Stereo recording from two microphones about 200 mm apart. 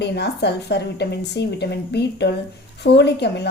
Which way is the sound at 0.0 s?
55° left (ahead or behind).